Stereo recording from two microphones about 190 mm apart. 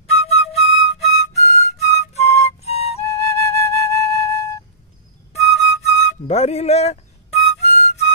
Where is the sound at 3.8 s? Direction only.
15° left (ahead or behind).